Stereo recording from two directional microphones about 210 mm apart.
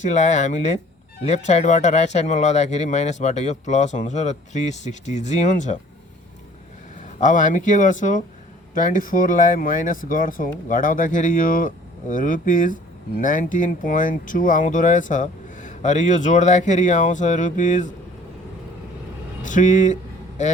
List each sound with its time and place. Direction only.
0.0 s speech: 35° left (ahead or behind)
7.0 s speech: 35° left (ahead or behind)
19.5 s speech: 35° left (ahead or behind)